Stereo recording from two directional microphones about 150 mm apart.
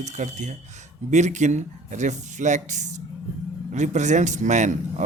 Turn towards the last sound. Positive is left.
turn(degrees=-55)  # may be behind; listen again after turning